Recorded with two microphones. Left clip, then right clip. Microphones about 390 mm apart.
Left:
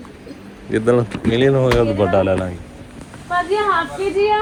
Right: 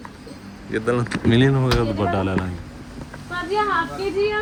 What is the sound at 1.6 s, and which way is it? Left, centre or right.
Speech, left.